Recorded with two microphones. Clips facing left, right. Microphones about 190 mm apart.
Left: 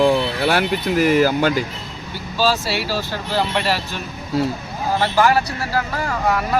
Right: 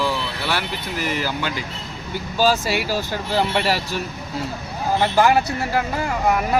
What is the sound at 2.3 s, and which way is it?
Speech, 15° right (ahead or behind).